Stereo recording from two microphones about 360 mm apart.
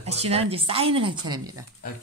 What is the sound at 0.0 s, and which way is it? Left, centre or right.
A woman's voice, centre.